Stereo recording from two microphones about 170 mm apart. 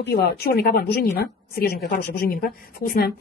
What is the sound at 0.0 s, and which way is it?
Speech, 70° left (ahead or behind).